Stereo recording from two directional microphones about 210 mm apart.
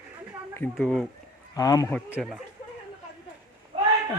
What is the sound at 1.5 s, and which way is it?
Speech, 15° left (ahead or behind).